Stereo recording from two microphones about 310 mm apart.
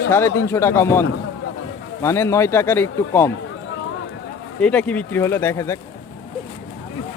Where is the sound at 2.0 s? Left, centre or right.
Centre.